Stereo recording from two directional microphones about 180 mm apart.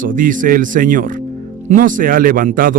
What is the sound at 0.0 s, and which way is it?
A man's voice, 50° right (ahead or behind).